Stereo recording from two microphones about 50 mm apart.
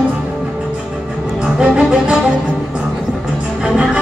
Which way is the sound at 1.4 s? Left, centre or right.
Centre.